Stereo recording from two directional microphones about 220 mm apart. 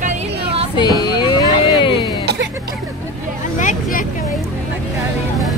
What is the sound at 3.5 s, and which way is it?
Speech, 35° left (ahead or behind).